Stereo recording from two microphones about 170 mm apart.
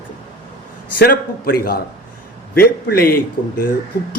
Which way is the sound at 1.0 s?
60° left (ahead or behind).